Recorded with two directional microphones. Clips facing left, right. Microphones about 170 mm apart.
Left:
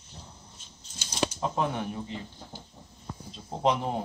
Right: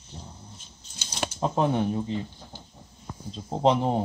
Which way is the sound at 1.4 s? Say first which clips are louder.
Right 10 dB; 30° right (ahead or behind).